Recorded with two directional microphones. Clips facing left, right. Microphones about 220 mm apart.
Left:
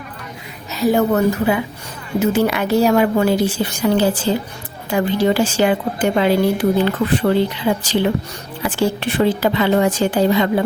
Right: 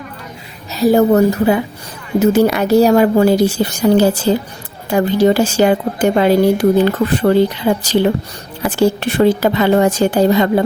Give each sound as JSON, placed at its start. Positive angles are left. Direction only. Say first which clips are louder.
{"t": 0.7, "sound": "a woman's voice", "louder": "right 5 dB", "side_deg": -35}
{"t": 8.6, "sound": "a woman's voice", "louder": "right 5 dB", "side_deg": -40}